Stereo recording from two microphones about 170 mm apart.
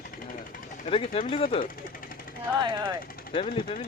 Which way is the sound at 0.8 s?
35° left (ahead or behind).